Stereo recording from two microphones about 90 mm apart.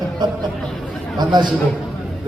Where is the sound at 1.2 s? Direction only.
55° right (ahead or behind).